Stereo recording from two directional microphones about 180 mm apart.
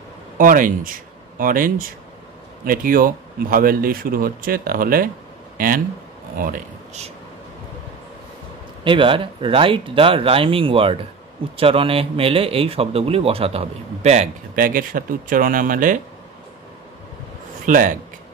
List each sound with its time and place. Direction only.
0.4 s speech: 50° right (ahead or behind)
6.3 s speech: 50° right (ahead or behind)
8.8 s speech: 30° right (ahead or behind); by 16.0 s 50° right (ahead or behind)
17.6 s speech: 45° right (ahead or behind)